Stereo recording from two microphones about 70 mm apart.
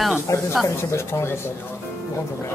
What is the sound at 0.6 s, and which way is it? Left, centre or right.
Speech, left.